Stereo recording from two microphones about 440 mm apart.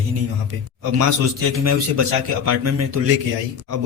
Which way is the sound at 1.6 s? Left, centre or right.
Right.